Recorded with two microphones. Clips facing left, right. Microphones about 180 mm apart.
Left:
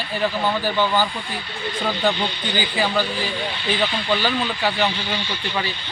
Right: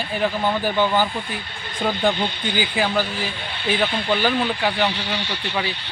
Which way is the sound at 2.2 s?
50° right (ahead or behind).